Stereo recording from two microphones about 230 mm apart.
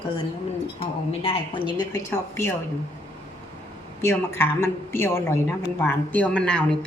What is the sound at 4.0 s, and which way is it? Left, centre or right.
A woman's voice, centre.